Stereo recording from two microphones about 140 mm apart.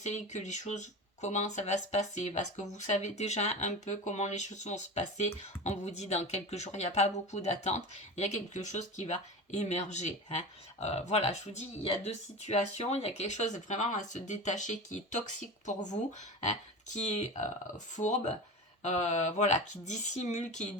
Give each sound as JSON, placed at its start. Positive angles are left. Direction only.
{"t": 0.0, "sound": "speech", "side_deg": 55}